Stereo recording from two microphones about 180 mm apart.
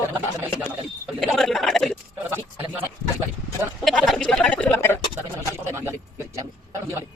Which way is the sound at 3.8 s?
Centre (ahead or behind).